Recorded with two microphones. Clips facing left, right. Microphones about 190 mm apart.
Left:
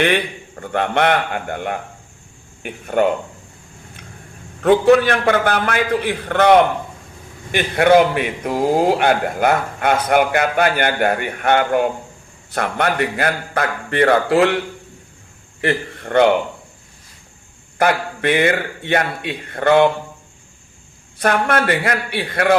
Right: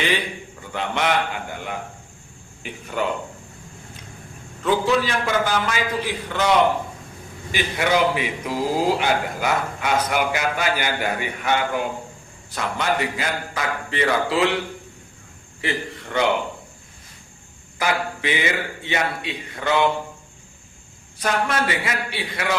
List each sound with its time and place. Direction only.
0.6 s a man's voice: 60° left (ahead or behind)
4.6 s a man's voice: 60° left (ahead or behind)
15.6 s a man's voice: 55° left (ahead or behind)
17.7 s a man's voice: 55° left (ahead or behind)
21.2 s a man's voice: 60° left (ahead or behind)